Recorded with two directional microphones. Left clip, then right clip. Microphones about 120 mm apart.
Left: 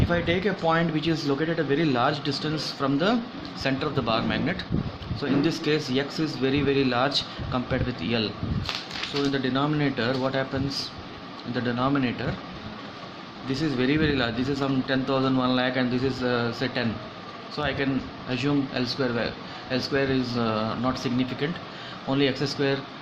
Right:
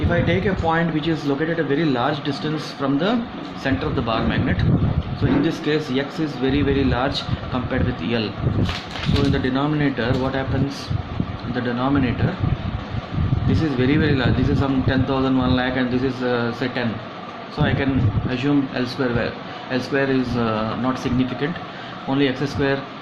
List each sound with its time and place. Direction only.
0.1 s speech: 40° left (ahead or behind)
9.3 s a man's voice: 35° left (ahead or behind)
11.5 s a man's voice: 40° left (ahead or behind)
13.5 s a man's voice: 40° left (ahead or behind)
22.1 s a man's voice: 40° left (ahead or behind)